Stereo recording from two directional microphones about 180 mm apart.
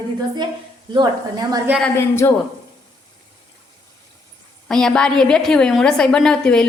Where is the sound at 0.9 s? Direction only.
25° right (ahead or behind).